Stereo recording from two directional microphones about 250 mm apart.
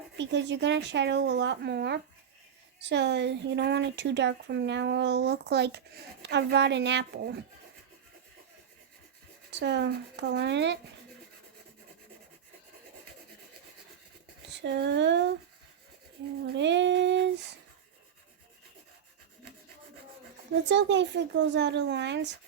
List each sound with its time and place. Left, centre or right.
0.2 s speech: right
9.5 s speech: right
14.5 s speech: right
16.5 s speech: right
20.7 s speech: right